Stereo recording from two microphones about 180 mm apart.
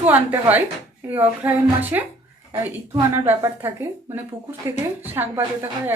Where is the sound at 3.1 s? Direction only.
15° right (ahead or behind).